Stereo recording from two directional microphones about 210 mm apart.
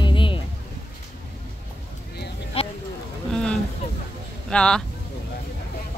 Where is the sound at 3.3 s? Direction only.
5° left (ahead or behind).